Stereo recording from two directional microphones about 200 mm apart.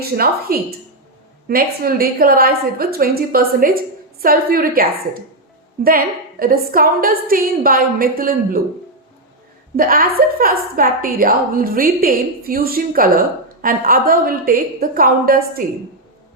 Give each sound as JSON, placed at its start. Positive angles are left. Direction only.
{"t": 0.2, "sound": "a woman's voice", "side_deg": -50}
{"t": 6.4, "sound": "a woman's voice", "side_deg": -45}
{"t": 9.7, "sound": "a woman's voice", "side_deg": -45}